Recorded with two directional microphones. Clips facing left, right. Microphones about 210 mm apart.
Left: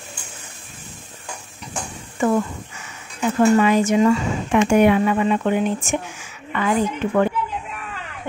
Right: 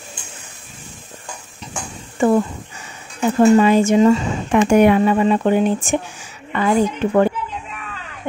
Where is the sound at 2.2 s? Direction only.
30° right (ahead or behind).